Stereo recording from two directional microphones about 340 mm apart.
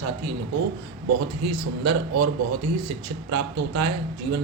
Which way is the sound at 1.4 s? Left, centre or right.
Right.